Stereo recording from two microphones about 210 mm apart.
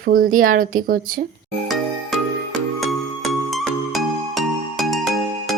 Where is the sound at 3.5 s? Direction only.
Centre (ahead or behind).